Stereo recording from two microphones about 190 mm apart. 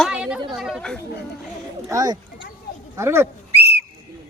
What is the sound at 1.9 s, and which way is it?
Speech, 20° right (ahead or behind).